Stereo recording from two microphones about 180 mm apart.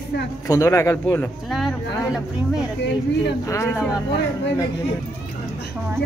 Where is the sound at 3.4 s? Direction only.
15° left (ahead or behind).